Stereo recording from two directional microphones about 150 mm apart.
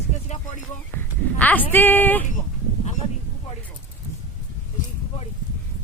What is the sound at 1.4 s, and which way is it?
Speech, 10° left (ahead or behind).